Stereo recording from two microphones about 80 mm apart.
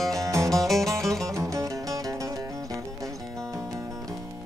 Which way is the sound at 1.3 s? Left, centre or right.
Right.